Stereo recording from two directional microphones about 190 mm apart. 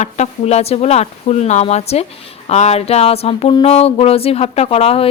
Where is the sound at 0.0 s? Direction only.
35° left (ahead or behind).